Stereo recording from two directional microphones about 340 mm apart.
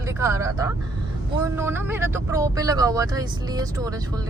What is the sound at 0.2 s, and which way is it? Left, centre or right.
Speech, centre.